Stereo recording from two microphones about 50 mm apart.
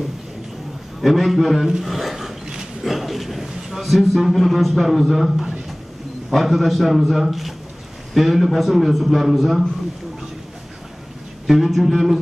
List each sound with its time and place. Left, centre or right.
1.0 s speech: centre
1.8 s a sound: centre
2.8 s a man's voice: centre
11.4 s speech: centre